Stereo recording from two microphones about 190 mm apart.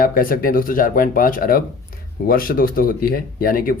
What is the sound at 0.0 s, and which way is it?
Speech, 50° left (ahead or behind).